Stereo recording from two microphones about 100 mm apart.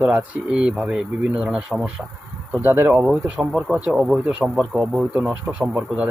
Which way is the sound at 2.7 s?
20° right (ahead or behind).